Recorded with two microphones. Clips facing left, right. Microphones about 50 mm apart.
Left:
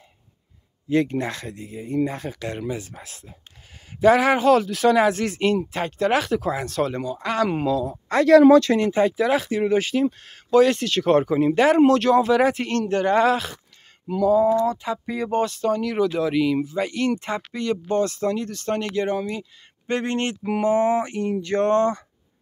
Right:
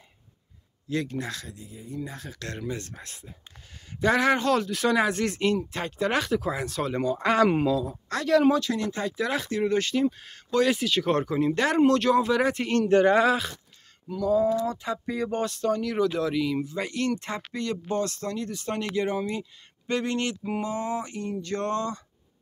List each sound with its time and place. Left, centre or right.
0.8 s speech: left
2.3 s speech: centre
2.7 s speech: centre
7.2 s speech: right
7.5 s speech: centre
8.3 s speech: left
8.7 s speech: left
9.1 s speech: centre
10.0 s speech: centre
12.6 s speech: centre
13.1 s speech: centre
18.5 s speech: centre
19.9 s speech: left